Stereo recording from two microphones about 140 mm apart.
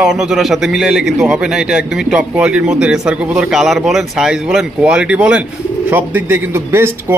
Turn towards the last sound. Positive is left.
turn(degrees=-15)  # may be behind; listen again after turning